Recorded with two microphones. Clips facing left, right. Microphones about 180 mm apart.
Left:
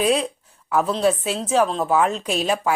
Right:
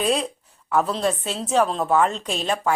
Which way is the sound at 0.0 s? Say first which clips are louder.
Left 3 dB; centre (ahead or behind).